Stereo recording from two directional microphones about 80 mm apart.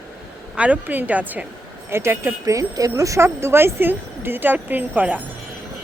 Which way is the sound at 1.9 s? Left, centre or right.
Right.